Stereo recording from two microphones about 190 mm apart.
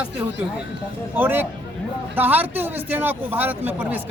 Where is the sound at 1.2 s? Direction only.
10° right (ahead or behind).